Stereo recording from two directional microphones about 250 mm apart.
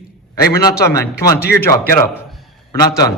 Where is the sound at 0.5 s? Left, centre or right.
Centre.